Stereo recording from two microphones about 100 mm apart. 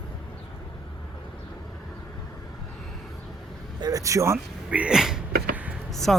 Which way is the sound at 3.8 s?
35° right (ahead or behind).